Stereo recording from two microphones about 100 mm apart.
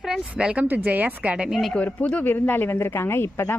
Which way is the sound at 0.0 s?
5° right (ahead or behind).